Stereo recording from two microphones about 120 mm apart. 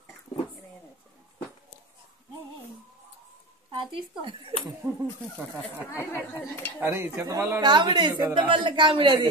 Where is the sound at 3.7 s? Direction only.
45° right (ahead or behind).